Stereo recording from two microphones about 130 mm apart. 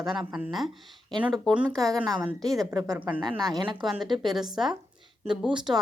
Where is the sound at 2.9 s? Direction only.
15° right (ahead or behind).